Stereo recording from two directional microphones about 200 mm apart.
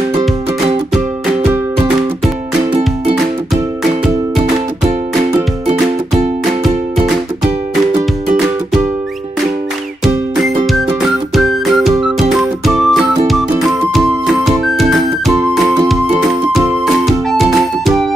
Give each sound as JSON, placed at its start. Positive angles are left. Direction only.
{"t": 5.7, "sound": "music", "side_deg": -35}
{"t": 11.3, "sound": "music", "side_deg": 0}